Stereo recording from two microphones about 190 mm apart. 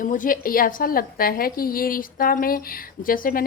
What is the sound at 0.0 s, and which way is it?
A woman's voice, 45° left (ahead or behind).